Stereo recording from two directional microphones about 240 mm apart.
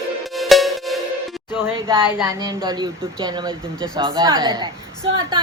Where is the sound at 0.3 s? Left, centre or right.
Centre.